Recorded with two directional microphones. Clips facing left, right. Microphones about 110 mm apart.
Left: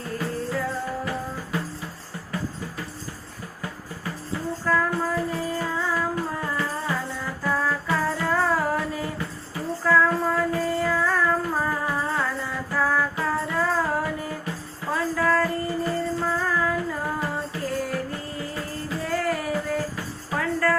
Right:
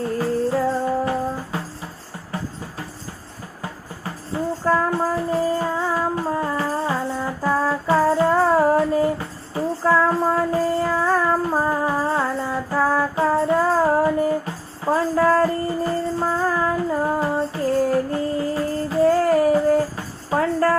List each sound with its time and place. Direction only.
0.2 s music: 30° right (ahead or behind)
4.6 s music: 30° right (ahead or behind)